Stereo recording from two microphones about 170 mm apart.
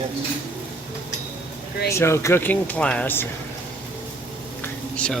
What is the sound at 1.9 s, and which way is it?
Speech, 15° left (ahead or behind).